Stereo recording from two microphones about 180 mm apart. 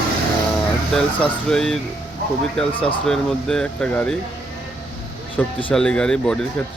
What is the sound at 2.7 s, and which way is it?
Speech, 30° left (ahead or behind).